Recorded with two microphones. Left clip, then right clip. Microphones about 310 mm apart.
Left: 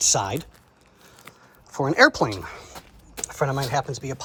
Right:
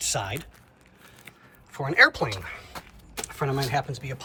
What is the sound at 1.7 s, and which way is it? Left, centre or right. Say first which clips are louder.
Speech: left 2 dB; centre.